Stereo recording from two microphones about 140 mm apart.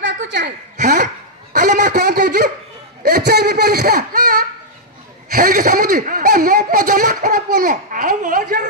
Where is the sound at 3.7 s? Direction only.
90° right.